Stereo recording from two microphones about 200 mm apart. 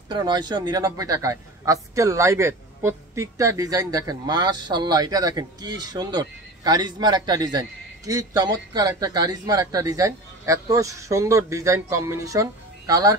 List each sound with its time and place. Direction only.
0.1 s a man's voice: 20° right (ahead or behind)